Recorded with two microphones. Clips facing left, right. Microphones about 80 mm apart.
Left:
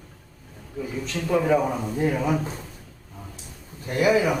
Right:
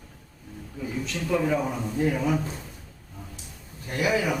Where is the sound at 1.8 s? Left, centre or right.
Centre.